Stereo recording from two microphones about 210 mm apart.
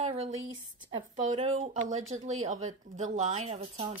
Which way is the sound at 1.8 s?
75° right (ahead or behind).